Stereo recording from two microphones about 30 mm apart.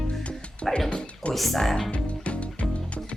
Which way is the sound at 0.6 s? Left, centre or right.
Centre.